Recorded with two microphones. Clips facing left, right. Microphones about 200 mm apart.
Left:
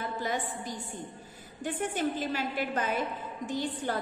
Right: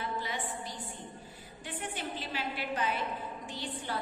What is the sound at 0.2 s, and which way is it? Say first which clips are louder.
A woman's voice: left 5 dB; 45° left (ahead or behind).